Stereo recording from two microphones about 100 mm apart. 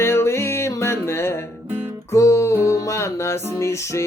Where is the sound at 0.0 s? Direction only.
25° left (ahead or behind).